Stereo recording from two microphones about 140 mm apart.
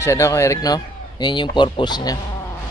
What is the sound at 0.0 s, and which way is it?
Speech, 20° left (ahead or behind).